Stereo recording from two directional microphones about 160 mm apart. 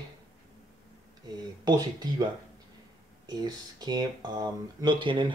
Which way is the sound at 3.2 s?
25° right (ahead or behind).